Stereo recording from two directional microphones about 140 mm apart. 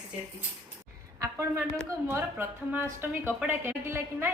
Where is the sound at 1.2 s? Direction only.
25° right (ahead or behind).